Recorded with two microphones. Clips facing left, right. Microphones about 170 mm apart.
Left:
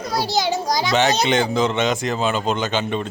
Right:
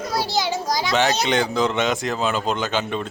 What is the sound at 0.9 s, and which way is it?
Speech, centre (ahead or behind).